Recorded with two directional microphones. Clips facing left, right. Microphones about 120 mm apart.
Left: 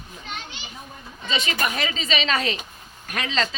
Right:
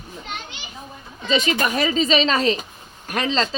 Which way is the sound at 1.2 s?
40° right (ahead or behind).